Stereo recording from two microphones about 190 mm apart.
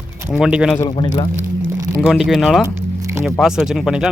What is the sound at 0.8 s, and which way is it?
Speech, 25° left (ahead or behind).